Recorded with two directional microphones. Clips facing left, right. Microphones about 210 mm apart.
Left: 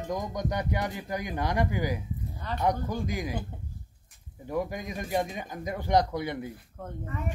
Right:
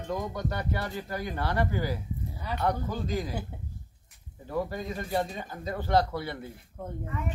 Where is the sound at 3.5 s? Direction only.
5° right (ahead or behind).